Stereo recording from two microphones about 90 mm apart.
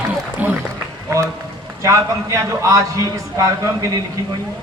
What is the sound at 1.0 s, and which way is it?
Run, 35° right (ahead or behind).